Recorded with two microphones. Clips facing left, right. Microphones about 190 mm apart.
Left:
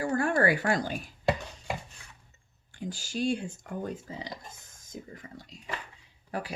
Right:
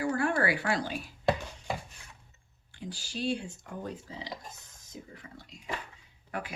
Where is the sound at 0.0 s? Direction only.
45° left (ahead or behind).